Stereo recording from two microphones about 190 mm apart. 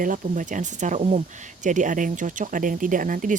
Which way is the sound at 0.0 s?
45° right (ahead or behind).